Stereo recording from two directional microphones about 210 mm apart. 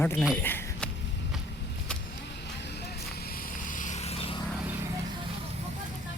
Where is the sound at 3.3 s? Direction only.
40° left (ahead or behind).